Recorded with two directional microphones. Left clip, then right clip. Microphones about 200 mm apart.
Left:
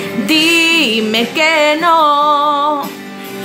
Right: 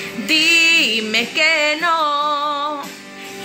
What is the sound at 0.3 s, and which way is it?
Music, 10° left (ahead or behind).